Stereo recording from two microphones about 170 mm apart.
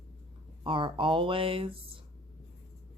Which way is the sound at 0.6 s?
30° right (ahead or behind).